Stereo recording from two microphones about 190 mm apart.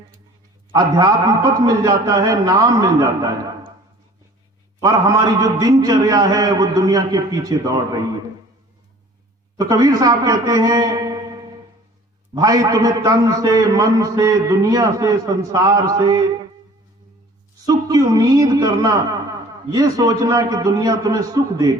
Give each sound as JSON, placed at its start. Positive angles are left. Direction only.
{"t": 0.7, "sound": "a man's voice", "side_deg": -20}
{"t": 4.8, "sound": "a man's voice", "side_deg": -15}
{"t": 9.6, "sound": "a man's voice", "side_deg": -20}
{"t": 17.7, "sound": "a man's voice", "side_deg": -20}